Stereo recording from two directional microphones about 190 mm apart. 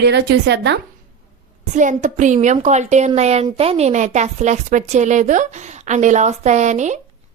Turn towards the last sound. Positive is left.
turn(degrees=-40)  # may be behind; listen again after turning